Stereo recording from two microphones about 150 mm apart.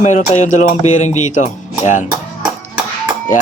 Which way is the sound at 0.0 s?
55° left (ahead or behind).